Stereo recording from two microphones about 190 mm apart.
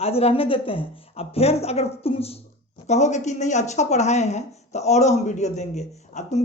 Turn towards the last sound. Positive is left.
turn(degrees=35)  # may be behind; listen again after turning